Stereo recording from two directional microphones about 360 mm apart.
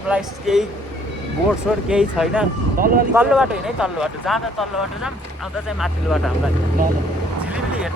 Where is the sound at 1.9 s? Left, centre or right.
Centre.